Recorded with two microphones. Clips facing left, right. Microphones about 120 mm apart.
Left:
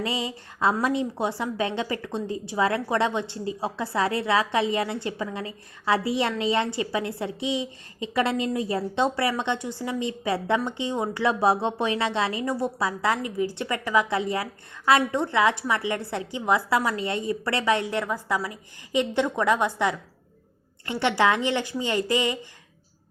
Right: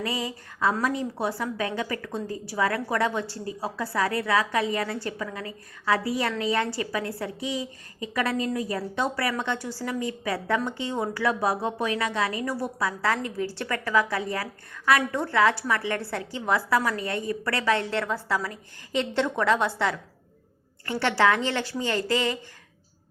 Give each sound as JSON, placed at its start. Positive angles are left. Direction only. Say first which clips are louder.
{"t": 0.0, "sound": "a woman's voice", "louder": "left 1 dB", "side_deg": 25}